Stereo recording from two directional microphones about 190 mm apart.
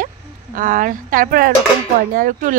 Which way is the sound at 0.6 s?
45° right (ahead or behind).